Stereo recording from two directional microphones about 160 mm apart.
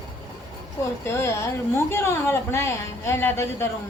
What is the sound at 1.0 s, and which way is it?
A woman's voice, 15° left (ahead or behind).